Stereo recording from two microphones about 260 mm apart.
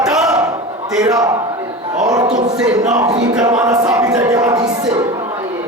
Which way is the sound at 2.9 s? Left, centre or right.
Centre.